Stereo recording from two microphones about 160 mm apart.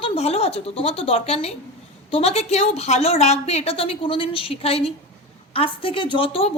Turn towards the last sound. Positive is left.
turn(degrees=35)  # may be behind; listen again after turning